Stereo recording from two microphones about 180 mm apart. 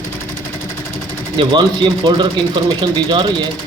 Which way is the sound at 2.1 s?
25° right (ahead or behind).